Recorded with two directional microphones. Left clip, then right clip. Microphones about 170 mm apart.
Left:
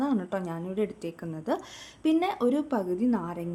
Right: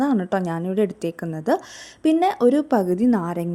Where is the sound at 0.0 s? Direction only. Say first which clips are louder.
Right 8 dB; 40° right (ahead or behind).